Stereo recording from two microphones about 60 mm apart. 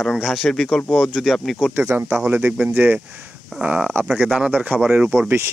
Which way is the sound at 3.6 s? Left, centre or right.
Centre.